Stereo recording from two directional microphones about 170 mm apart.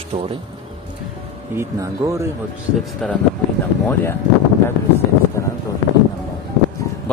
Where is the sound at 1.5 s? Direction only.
15° right (ahead or behind).